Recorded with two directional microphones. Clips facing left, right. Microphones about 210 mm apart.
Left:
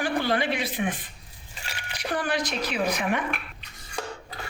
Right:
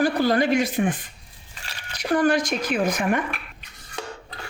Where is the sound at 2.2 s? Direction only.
45° right (ahead or behind).